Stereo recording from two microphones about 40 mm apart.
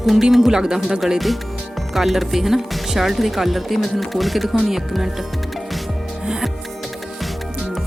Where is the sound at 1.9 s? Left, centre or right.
Centre.